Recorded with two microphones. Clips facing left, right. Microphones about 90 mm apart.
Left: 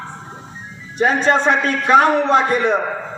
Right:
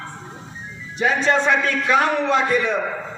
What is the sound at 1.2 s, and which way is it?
A man's voice, 35° left (ahead or behind).